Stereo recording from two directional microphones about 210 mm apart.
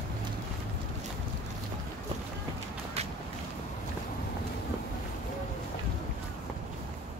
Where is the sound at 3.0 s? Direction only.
30° right (ahead or behind).